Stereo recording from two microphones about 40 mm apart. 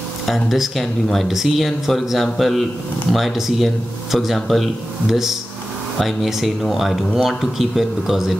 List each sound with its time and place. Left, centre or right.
0.3 s a man's voice: centre
5.1 s a man's voice: centre